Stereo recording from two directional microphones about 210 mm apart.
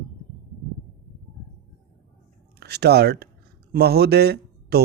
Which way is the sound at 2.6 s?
50° right (ahead or behind).